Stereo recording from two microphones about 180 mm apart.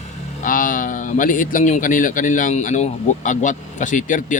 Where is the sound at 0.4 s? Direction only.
50° left (ahead or behind).